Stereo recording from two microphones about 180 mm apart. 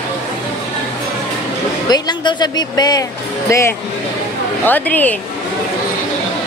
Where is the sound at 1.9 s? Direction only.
25° left (ahead or behind).